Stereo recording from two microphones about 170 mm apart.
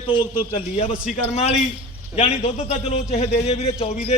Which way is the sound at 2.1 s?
35° left (ahead or behind).